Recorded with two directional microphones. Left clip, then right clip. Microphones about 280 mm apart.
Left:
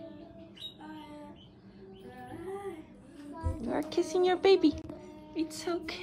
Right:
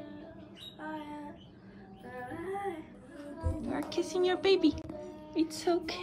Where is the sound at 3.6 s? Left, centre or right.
Centre.